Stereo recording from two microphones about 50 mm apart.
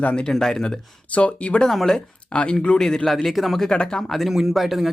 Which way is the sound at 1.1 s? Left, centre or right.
Left.